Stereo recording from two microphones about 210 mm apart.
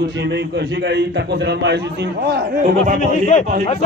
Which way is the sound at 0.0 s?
55° right (ahead or behind).